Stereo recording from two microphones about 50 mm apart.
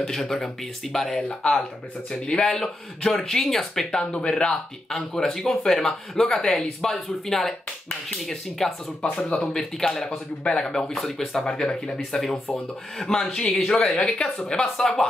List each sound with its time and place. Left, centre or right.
0.0 s speech: centre
13.3 s a man's voice: centre
13.7 s speech: centre